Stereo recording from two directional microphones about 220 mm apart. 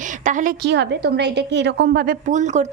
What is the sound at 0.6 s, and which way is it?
A woman's voice, 50° right (ahead or behind).